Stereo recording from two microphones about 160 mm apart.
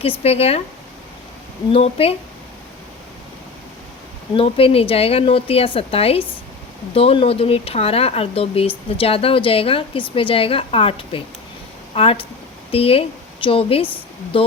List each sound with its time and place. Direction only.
0.2 s speech: 40° left (ahead or behind)
1.7 s speech: 40° left (ahead or behind)
4.4 s a woman's voice: 35° left (ahead or behind)